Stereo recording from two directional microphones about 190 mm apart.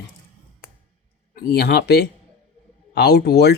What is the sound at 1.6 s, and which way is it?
Speech, 55° left (ahead or behind).